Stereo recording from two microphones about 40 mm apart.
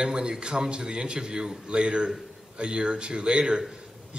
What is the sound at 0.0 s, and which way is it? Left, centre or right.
Speech, centre.